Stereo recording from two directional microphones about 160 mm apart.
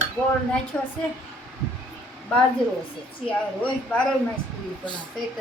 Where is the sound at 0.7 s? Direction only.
10° left (ahead or behind).